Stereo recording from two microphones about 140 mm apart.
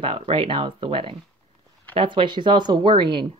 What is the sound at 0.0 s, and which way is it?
Speech, 40° right (ahead or behind).